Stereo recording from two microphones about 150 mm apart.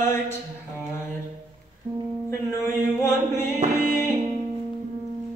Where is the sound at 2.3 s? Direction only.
15° left (ahead or behind).